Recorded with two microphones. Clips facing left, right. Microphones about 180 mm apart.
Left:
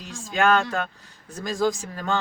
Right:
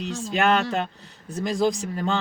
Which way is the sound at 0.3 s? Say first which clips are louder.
Left 1 dB; 20° right (ahead or behind).